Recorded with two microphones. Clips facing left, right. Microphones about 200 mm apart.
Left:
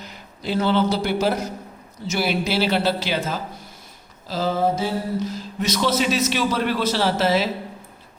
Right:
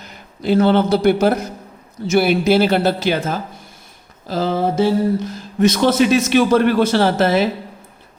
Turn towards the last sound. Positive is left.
turn(degrees=-55)  # may be behind; listen again after turning